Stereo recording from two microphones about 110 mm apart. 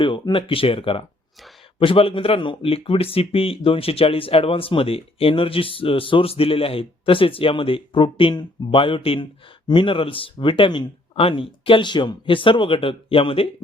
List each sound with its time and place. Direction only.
0.0 s speech: 50° left (ahead or behind)